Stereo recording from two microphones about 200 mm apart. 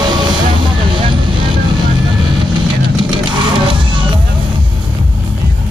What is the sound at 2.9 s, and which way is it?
Music, 25° right (ahead or behind).